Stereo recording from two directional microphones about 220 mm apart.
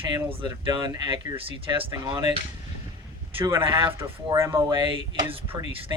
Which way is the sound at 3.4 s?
20° right (ahead or behind).